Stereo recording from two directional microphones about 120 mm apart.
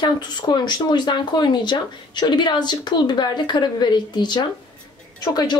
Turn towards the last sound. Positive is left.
turn(degrees=35)  # may be behind; listen again after turning